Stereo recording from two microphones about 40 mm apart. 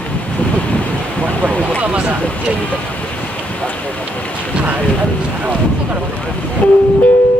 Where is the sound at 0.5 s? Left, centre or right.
Left.